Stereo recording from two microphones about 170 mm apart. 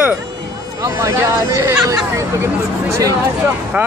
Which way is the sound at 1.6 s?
15° right (ahead or behind).